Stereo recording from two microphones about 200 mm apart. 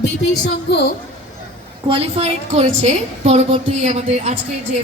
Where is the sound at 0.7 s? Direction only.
55° left (ahead or behind).